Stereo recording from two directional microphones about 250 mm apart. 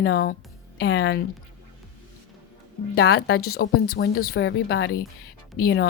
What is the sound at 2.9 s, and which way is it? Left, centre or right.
A woman's voice, left.